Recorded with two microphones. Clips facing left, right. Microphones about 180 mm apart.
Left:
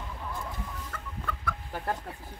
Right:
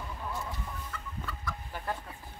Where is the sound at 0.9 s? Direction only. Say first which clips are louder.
Left 3 dB; 55° left (ahead or behind).